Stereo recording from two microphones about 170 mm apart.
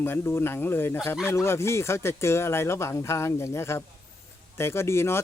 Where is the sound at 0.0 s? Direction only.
15° left (ahead or behind).